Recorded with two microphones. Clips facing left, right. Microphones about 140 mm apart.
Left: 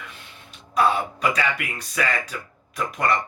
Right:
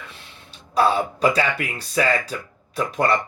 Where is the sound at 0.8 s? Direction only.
30° right (ahead or behind).